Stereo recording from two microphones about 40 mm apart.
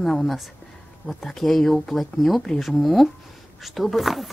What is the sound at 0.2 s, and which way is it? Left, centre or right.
Speech, centre.